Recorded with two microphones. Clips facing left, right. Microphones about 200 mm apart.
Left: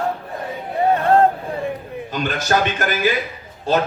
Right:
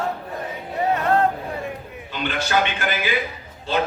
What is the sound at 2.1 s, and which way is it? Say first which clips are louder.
Speech: left 2 dB; 45° left (ahead or behind).